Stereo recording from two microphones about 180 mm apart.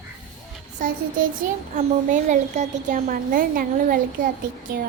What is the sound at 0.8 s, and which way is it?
A woman's voice, 50° right (ahead or behind).